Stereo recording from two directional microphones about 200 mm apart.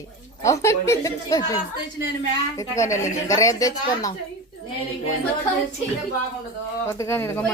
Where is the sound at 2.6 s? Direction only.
15° left (ahead or behind).